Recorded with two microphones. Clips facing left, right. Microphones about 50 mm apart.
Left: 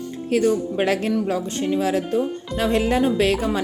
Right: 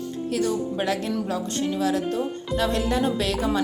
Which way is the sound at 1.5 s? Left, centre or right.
Left.